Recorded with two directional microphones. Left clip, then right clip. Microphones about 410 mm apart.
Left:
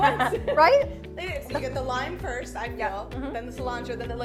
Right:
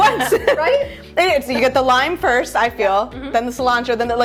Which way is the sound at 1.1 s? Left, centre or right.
Right.